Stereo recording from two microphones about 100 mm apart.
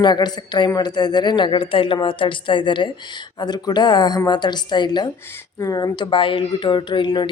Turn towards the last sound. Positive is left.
turn(degrees=50)  # may be behind; listen again after turning